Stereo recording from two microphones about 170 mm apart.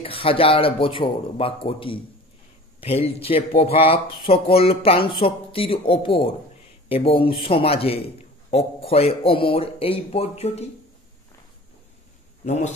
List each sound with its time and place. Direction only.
0.0 s a man's voice: 35° left (ahead or behind)
12.4 s a man's voice: 40° left (ahead or behind)